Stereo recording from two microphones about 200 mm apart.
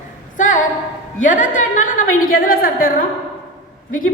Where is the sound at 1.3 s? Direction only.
40° left (ahead or behind).